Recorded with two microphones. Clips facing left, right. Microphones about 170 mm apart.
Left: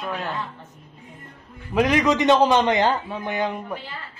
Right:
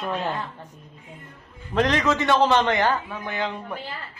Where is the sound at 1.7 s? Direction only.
10° left (ahead or behind).